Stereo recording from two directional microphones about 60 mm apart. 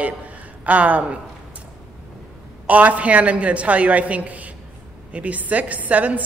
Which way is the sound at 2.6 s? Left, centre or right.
Right.